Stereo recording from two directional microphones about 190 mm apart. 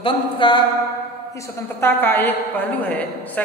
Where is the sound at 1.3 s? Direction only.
15° left (ahead or behind).